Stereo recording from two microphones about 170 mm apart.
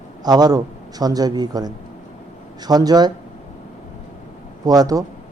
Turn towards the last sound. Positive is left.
turn(degrees=-20)  # may be behind; listen again after turning